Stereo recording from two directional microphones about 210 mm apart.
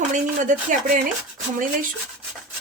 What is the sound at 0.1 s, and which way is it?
Speech, 40° right (ahead or behind).